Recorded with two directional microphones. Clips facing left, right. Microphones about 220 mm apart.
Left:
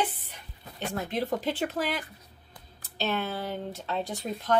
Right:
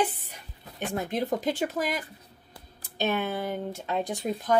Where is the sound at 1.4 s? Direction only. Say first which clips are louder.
Right 1 dB; 10° right (ahead or behind).